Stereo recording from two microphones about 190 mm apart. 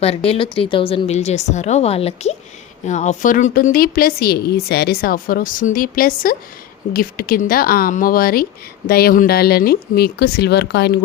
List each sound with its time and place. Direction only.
0.3 s a woman's voice: 30° left (ahead or behind); by 11.0 s 60° left (ahead or behind)